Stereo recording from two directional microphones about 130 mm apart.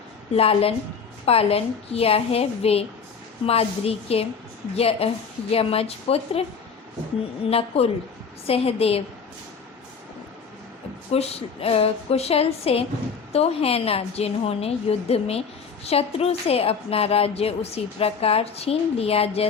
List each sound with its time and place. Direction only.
0.3 s a woman's voice: 50° left (ahead or behind)
7.4 s a woman's voice: 50° left (ahead or behind)
11.1 s a woman's voice: 50° left (ahead or behind)